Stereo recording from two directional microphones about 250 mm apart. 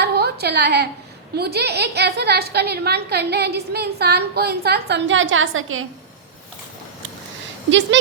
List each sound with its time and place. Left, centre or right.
0.0 s a sound: right
1.4 s a woman's voice: right
7.7 s speech: right